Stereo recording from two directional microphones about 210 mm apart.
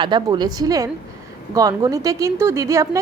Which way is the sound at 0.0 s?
20° right (ahead or behind).